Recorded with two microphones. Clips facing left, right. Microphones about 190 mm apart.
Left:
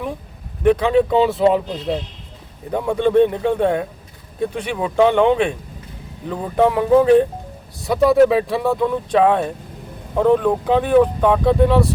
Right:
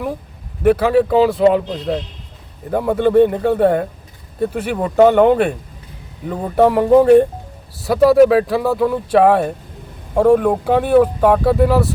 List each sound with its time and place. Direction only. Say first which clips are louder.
0.6 s speech: right 2 dB; 5° right (ahead or behind)